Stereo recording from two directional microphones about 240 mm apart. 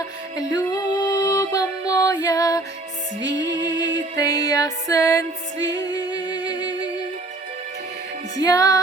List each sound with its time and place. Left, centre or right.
0.5 s music: centre
3.7 s music: centre
5.6 s singing: centre
8.4 s music: centre